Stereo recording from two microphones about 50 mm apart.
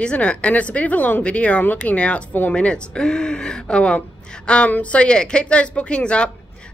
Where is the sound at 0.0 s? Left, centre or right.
Left.